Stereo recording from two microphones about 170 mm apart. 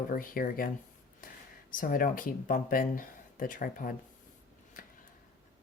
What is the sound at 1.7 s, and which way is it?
Speech, 55° left (ahead or behind).